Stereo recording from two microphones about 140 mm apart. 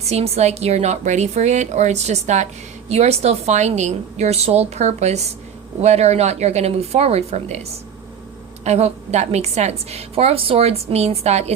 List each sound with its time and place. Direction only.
0.0 s a woman's voice: 50° right (ahead or behind)
8.6 s a woman's voice: 50° right (ahead or behind)